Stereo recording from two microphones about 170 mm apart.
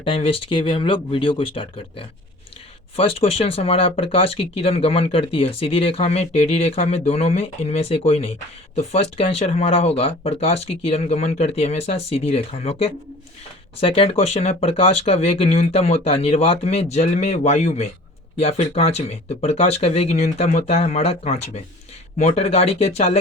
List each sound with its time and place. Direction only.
0.0 s speech: 35° left (ahead or behind)